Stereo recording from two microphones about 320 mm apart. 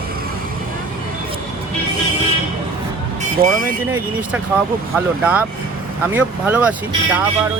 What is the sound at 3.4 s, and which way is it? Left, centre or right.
Speech, right.